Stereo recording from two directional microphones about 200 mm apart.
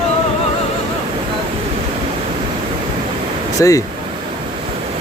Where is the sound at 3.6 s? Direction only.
15° left (ahead or behind).